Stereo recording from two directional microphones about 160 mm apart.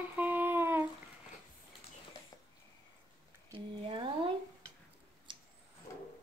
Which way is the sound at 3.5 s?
30° right (ahead or behind).